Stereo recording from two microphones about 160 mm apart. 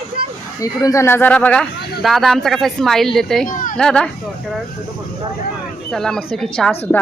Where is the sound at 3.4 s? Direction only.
55° left (ahead or behind).